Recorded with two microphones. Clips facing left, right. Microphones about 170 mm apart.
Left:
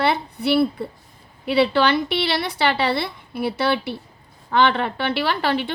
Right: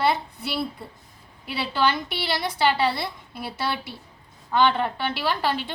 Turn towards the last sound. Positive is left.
turn(degrees=70)  # may be behind; listen again after turning